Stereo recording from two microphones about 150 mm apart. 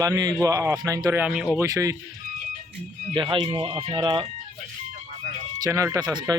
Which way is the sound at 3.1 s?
35° right (ahead or behind).